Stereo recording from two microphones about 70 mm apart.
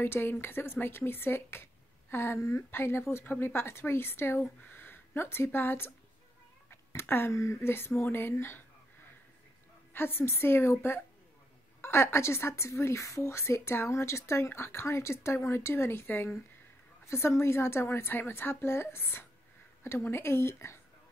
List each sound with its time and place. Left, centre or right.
0.0 s speech: left
9.9 s speech: left